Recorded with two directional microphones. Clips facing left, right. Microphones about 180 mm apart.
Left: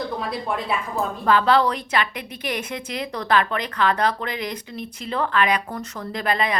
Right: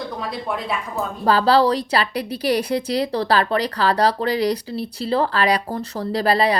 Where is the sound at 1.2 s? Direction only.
35° right (ahead or behind).